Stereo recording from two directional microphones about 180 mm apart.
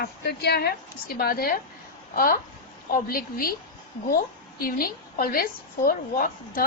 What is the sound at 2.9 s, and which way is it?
A woman's voice, 55° left (ahead or behind).